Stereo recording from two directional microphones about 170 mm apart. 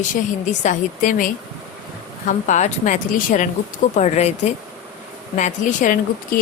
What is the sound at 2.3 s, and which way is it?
A woman's voice, 45° left (ahead or behind).